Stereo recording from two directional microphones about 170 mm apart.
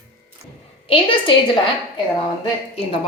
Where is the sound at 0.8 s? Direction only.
30° left (ahead or behind).